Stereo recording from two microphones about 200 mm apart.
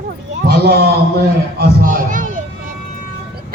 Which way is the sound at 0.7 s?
50° right (ahead or behind).